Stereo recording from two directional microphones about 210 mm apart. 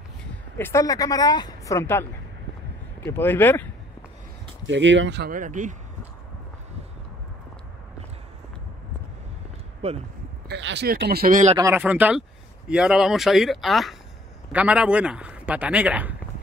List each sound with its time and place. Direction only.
0.6 s speech: 10° left (ahead or behind)
4.6 s speech: 60° right (ahead or behind)
5.3 s speech: 40° right (ahead or behind)
9.8 s speech: 30° right (ahead or behind)
10.5 s speech: 55° right (ahead or behind); by 11.5 s 40° right (ahead or behind)
11.5 s speech: 10° right (ahead or behind)